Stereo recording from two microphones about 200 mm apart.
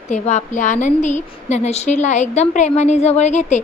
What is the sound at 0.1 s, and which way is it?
A woman's voice, 35° left (ahead or behind).